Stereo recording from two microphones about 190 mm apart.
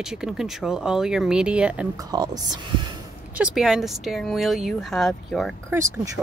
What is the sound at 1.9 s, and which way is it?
Speech, 20° right (ahead or behind).